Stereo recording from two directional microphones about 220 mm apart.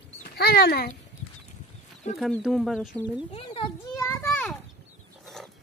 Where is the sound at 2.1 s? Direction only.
Centre (ahead or behind).